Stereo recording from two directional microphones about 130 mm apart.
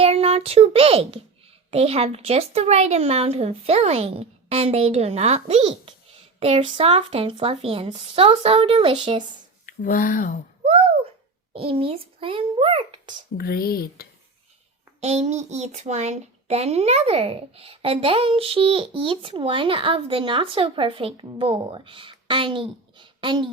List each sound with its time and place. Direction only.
0.0 s a child's voice: 50° right (ahead or behind)
9.6 s speech: 90° left
11.5 s a child's voice: 45° right (ahead or behind)
15.0 s a child's voice: 55° right (ahead or behind); by 23.5 s 40° right (ahead or behind)